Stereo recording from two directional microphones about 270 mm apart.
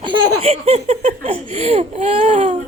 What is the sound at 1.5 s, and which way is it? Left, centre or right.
Speech, right.